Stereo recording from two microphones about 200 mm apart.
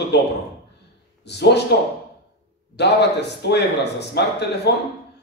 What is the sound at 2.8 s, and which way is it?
A man's voice, 60° left (ahead or behind).